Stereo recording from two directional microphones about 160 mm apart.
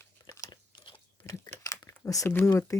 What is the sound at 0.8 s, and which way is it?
Crumpling, 20° left (ahead or behind).